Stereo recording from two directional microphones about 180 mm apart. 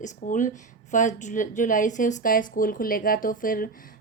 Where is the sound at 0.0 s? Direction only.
45° left (ahead or behind).